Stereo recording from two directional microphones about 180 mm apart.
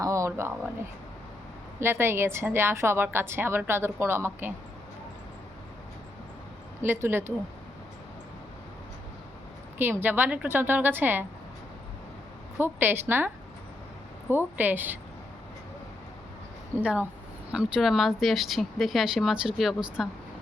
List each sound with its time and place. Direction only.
0.0 s speech: 15° right (ahead or behind)
1.8 s a woman's voice: 15° right (ahead or behind)
6.8 s a woman's voice: 15° right (ahead or behind)
9.7 s a woman's voice: 10° right (ahead or behind)
12.5 s a woman's voice: 10° right (ahead or behind)
16.8 s a woman's voice: 5° right (ahead or behind)